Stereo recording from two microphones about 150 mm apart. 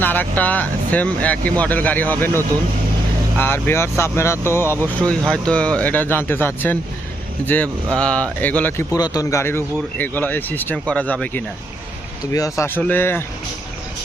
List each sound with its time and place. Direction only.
0.0 s speech: 10° left (ahead or behind)
9.0 s speech: 25° left (ahead or behind); by 11.4 s 10° left (ahead or behind)
12.3 s speech: 20° left (ahead or behind)